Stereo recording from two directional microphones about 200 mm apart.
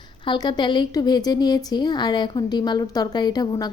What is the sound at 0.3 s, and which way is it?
A woman's voice, 20° left (ahead or behind).